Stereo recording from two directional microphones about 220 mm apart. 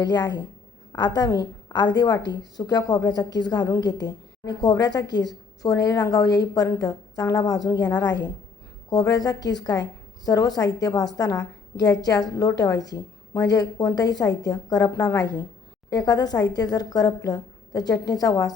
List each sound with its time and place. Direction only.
0.0 s a woman's voice: 20° left (ahead or behind)